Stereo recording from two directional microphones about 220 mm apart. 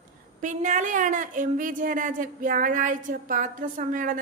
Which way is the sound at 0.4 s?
35° right (ahead or behind).